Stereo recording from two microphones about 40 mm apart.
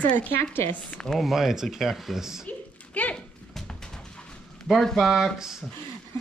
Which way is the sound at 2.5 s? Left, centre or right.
Left.